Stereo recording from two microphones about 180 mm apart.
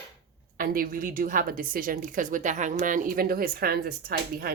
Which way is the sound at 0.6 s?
50° right (ahead or behind).